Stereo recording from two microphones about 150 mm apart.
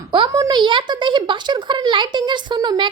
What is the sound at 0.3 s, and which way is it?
Speech, 25° right (ahead or behind).